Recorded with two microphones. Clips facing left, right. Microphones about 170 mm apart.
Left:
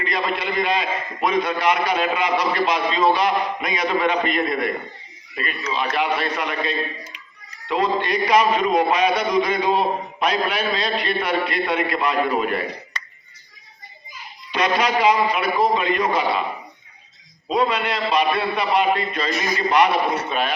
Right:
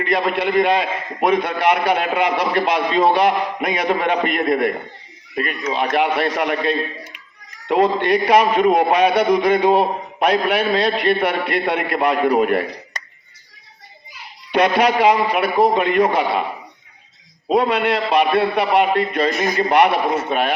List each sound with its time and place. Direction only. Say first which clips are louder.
0.0 s a man's voice: right 5 dB; 60° right (ahead or behind)
14.1 s a child's voice: right 9 dB; 60° right (ahead or behind)
17.5 s a man's voice: right 4 dB; 60° right (ahead or behind)